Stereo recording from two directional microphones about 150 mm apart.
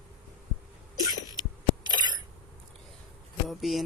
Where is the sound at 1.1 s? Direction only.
25° right (ahead or behind).